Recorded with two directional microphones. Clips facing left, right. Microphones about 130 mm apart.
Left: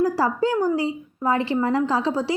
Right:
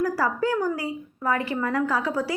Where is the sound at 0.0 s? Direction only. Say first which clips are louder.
Left 3 dB; 25° left (ahead or behind).